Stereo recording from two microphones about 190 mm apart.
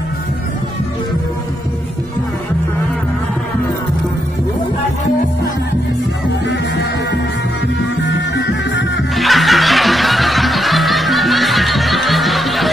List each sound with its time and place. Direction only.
8.0 s music: 70° left (ahead or behind)
9.1 s snicker: centre (ahead or behind)